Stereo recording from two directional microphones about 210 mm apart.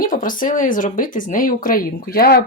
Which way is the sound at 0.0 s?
40° left (ahead or behind).